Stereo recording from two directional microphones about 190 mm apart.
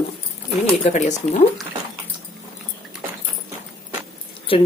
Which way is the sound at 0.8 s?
35° left (ahead or behind).